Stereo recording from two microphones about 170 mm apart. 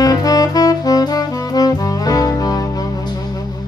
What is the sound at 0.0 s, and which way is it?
Saxophone, 20° left (ahead or behind).